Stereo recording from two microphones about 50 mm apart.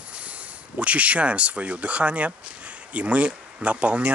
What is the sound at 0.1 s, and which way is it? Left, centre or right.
Speech, right.